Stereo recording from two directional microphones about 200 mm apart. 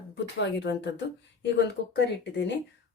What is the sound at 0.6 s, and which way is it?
Speech, 60° left (ahead or behind).